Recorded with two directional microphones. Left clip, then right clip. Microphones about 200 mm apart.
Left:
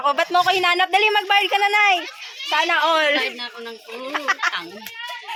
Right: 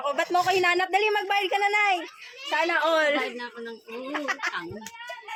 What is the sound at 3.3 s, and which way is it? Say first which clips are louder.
Speech: left 5 dB; 15° right (ahead or behind).